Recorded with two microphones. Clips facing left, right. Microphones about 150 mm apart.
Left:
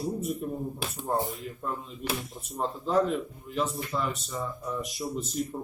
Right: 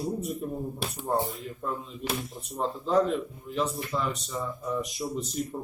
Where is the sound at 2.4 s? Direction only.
Centre (ahead or behind).